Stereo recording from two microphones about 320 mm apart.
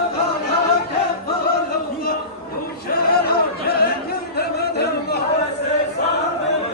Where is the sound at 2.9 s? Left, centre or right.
Left.